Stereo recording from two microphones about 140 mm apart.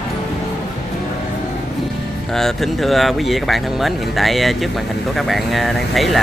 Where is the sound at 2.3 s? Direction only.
Centre (ahead or behind).